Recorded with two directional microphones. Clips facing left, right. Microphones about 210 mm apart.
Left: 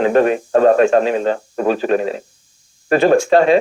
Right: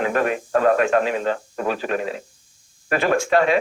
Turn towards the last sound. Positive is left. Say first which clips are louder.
# left 6 dB
turn(degrees=30)  # may be behind; listen again after turning